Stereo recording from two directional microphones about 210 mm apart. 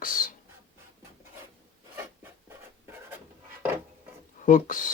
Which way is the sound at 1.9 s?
10° right (ahead or behind).